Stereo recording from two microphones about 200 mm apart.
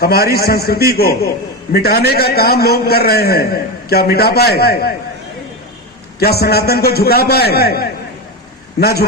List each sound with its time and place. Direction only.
0.0 s a man's voice: 50° left (ahead or behind)
6.1 s a man's voice: 50° left (ahead or behind)